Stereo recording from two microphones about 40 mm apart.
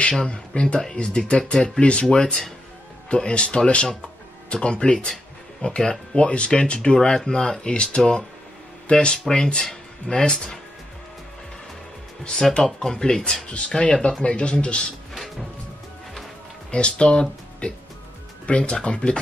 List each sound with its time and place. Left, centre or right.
0.0 s speech: left
1.8 s speech: left
7.6 s speech: left
12.6 s speech: centre
14.2 s speech: left
16.7 s speech: left